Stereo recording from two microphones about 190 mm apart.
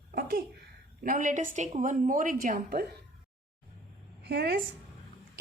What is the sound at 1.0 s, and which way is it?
A woman's voice, 45° right (ahead or behind).